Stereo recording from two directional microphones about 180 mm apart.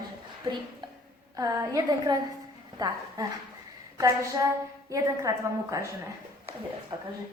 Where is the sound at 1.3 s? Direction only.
20° right (ahead or behind).